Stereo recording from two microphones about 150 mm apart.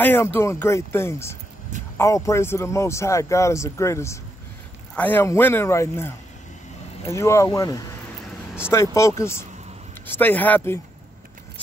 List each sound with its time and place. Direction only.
0.0 s speech: 15° left (ahead or behind)